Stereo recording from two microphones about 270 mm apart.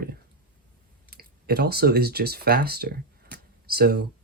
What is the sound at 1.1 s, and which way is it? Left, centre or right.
Speech, right.